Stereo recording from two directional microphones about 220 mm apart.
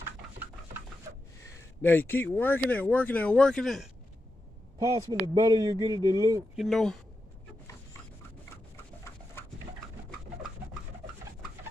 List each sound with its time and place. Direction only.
1.8 s speech: 10° left (ahead or behind)
4.7 s speech: 15° right (ahead or behind)
6.5 s speech: centre (ahead or behind)